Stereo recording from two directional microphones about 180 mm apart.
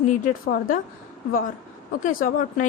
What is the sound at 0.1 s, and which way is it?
Speech, 50° left (ahead or behind).